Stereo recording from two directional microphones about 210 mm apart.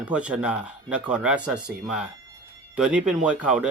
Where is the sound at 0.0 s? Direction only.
5° right (ahead or behind).